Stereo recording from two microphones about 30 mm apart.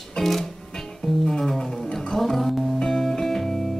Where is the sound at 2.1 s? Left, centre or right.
Centre.